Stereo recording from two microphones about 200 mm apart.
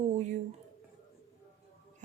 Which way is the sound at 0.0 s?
35° right (ahead or behind).